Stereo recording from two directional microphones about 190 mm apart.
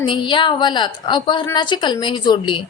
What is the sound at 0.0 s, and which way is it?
A woman's voice, 25° left (ahead or behind).